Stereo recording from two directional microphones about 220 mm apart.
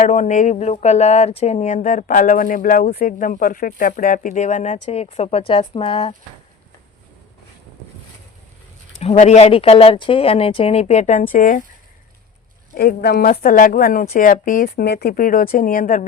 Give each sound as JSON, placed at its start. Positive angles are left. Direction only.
{"t": 0.0, "sound": "speech", "side_deg": 35}
{"t": 9.0, "sound": "speech", "side_deg": 30}
{"t": 12.7, "sound": "speech", "side_deg": 45}